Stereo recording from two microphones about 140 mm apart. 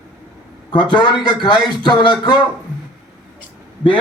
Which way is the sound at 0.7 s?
35° left (ahead or behind).